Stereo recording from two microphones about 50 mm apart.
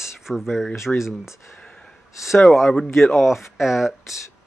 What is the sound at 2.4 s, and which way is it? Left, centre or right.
Speech, centre.